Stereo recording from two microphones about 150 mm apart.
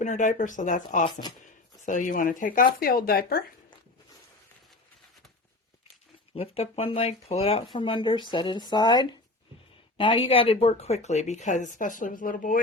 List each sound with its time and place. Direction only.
0.0 s speech: 55° left (ahead or behind)
2.8 s speech: 80° left
6.3 s speech: 40° left (ahead or behind); by 12.5 s 65° left (ahead or behind)